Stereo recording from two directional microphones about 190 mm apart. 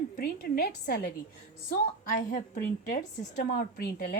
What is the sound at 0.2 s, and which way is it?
Speech, 55° left (ahead or behind).